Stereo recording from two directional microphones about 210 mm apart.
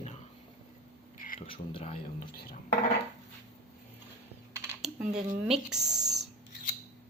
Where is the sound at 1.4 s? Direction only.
25° left (ahead or behind).